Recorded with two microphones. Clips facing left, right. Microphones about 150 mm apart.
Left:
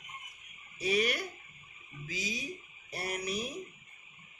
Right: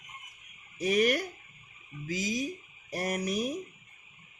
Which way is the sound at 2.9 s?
45° right (ahead or behind).